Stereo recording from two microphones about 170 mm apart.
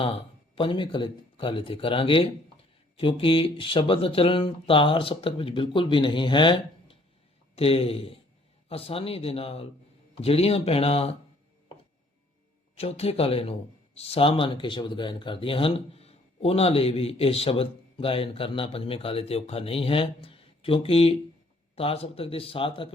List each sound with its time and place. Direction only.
0.0 s speech: 30° left (ahead or behind)
12.7 s speech: 35° left (ahead or behind)